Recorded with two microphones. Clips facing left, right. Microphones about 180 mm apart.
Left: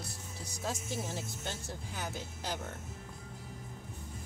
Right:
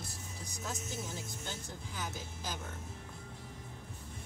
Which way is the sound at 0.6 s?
85° left.